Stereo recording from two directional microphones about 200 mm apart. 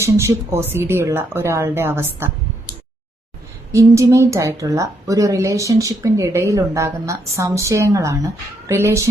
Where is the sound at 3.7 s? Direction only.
15° right (ahead or behind).